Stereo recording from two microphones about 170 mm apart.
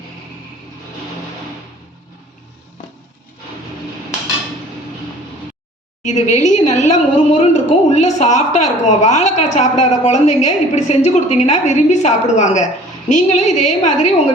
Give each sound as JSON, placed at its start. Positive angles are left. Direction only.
{"t": 6.1, "sound": "a woman's voice", "side_deg": 45}